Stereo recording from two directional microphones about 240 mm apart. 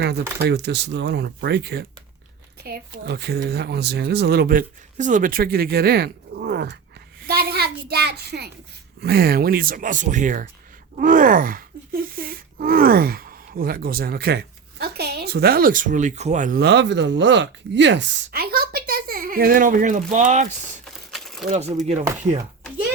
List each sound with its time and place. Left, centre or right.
0.4 s speech: right
7.3 s a sound: right
9.0 s speech: right
21.1 s crumpling: centre
21.5 s speech: right